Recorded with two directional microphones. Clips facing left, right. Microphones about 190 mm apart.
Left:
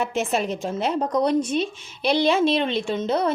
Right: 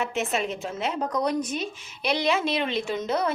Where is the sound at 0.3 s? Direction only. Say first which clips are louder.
Left 4 dB; 35° left (ahead or behind).